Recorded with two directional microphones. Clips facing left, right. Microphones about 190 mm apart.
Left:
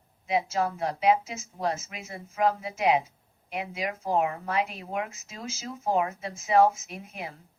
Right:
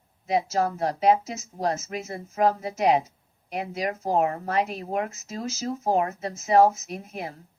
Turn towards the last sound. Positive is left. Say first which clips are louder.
# right 5 dB
turn(degrees=-40)  # may be behind; listen again after turning